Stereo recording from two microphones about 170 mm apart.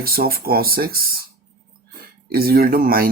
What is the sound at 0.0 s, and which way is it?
Speech, 60° right (ahead or behind).